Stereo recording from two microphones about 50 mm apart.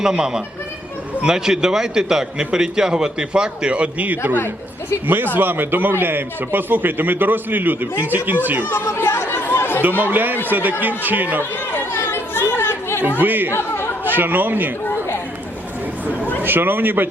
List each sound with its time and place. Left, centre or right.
0.0 s a man's voice: centre; by 8.4 s right
8.7 s chatter: left
10.0 s a man's voice: right
11.7 s chatter: left
13.1 s a man's voice: right
13.5 s chatter: left
14.0 s speech: right
16.4 s a man's voice: right